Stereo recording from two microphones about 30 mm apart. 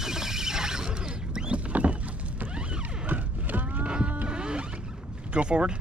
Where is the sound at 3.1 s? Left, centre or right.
Right.